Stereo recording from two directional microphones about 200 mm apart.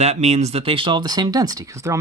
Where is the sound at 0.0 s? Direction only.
35° right (ahead or behind).